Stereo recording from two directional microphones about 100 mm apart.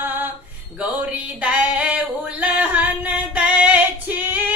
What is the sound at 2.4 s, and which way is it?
Female singing, 15° right (ahead or behind).